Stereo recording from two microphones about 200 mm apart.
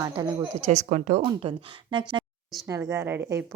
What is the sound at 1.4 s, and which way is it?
A woman's voice, 25° right (ahead or behind).